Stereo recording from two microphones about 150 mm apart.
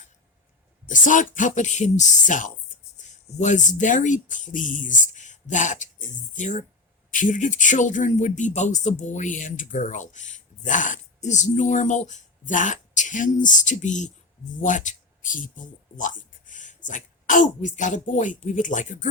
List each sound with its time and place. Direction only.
0.9 s a man's voice: 60° left (ahead or behind)